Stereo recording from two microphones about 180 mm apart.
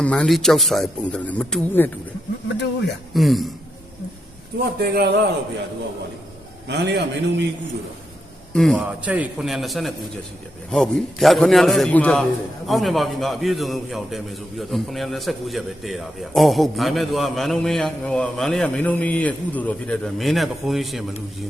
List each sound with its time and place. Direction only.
0.0 s a man's voice: 5° left (ahead or behind)
3.2 s a man's voice: centre (ahead or behind)
4.8 s a man's voice: 65° right (ahead or behind)
6.7 s a man's voice: 70° right (ahead or behind)
8.5 s a man's voice: centre (ahead or behind)